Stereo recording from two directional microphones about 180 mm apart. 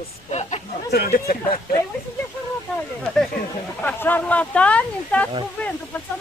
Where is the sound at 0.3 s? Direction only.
40° left (ahead or behind).